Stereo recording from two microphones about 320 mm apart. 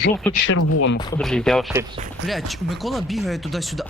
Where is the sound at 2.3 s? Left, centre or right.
Centre.